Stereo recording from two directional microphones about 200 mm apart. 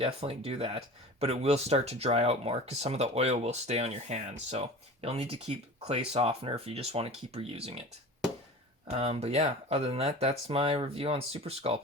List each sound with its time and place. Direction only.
0.0 s speech: 30° right (ahead or behind)
8.9 s speech: 30° right (ahead or behind)